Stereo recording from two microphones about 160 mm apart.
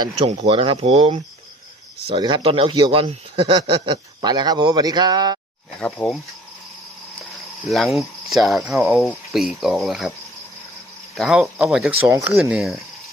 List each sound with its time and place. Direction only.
0.4 s speech: 35° right (ahead or behind)
6.0 s speech: 10° left (ahead or behind)
7.7 s speech: centre (ahead or behind)
11.1 s speech: centre (ahead or behind)